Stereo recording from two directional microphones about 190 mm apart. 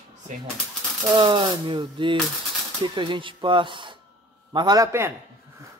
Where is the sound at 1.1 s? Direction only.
25° right (ahead or behind).